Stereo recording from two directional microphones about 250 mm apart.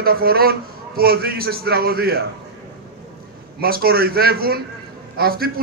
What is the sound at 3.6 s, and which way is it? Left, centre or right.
A man's voice, right.